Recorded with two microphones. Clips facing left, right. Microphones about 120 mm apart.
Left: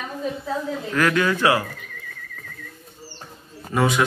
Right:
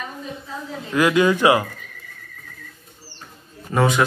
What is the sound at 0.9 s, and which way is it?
Speech, 15° right (ahead or behind).